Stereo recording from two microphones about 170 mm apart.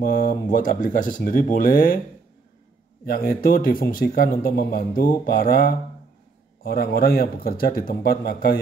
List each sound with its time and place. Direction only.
0.0 s speech: 55° left (ahead or behind)
3.1 s speech: 60° left (ahead or behind)